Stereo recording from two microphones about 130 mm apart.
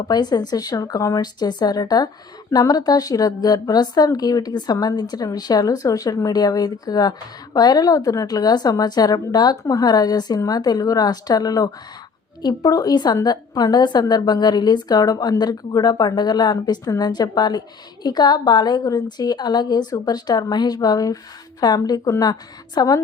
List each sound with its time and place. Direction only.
0.1 s a woman's voice: 30° left (ahead or behind)